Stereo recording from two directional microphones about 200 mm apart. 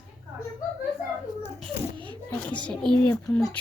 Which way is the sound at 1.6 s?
25° right (ahead or behind).